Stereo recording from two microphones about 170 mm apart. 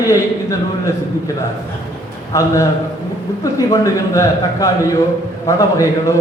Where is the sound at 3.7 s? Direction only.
20° left (ahead or behind).